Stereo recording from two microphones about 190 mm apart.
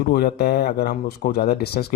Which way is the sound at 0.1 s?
60° left (ahead or behind).